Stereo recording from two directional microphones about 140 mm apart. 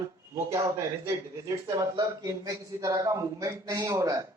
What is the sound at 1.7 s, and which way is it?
A man's voice, 25° right (ahead or behind).